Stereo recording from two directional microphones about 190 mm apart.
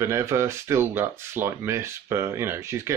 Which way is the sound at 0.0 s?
15° right (ahead or behind).